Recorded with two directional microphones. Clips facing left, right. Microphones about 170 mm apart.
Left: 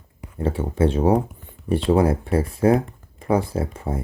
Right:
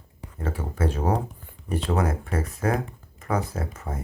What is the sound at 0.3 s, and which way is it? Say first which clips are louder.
Speech: left 8 dB; 30° left (ahead or behind).